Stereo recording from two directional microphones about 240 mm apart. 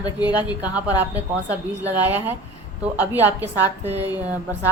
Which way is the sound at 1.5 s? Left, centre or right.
Centre.